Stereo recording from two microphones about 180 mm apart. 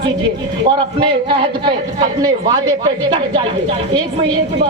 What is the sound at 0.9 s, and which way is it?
Speech, 25° right (ahead or behind).